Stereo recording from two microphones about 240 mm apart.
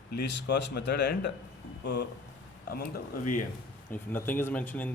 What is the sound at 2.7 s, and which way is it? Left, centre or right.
Speech, left.